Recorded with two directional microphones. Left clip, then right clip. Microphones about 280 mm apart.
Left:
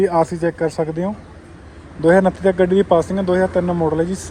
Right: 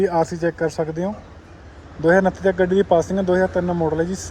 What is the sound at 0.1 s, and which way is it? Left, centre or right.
Speech, centre.